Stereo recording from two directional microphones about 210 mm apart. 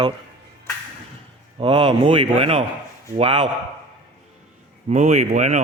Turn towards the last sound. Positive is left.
turn(degrees=-35)  # may be behind; listen again after turning